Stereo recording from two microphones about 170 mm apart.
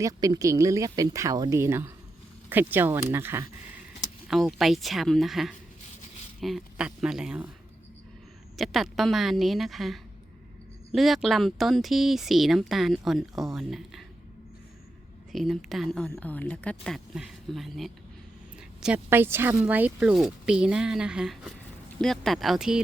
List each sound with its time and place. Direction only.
0.0 s speech: 20° right (ahead or behind)
4.3 s speech: centre (ahead or behind)
8.5 s speech: centre (ahead or behind)
15.3 s speech: centre (ahead or behind)